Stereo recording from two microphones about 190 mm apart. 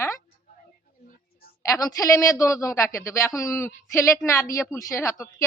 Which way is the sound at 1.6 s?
20° left (ahead or behind).